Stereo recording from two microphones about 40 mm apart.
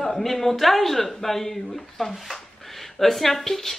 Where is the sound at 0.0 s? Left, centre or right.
Centre.